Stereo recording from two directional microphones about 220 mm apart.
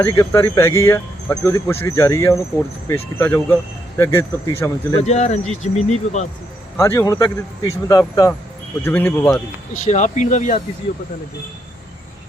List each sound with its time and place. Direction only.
0.0 s speech: 15° left (ahead or behind)
5.0 s speech: 30° left (ahead or behind)
6.7 s speech: 10° left (ahead or behind)
9.8 s speech: 30° left (ahead or behind)